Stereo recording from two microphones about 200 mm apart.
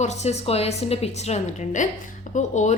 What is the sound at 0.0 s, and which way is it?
A woman's voice, 35° left (ahead or behind).